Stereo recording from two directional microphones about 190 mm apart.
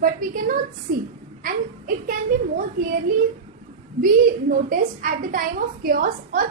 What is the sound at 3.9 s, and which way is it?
A woman's voice, 50° right (ahead or behind).